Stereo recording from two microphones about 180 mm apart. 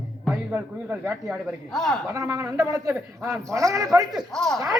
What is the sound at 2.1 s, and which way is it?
Speech, 20° right (ahead or behind).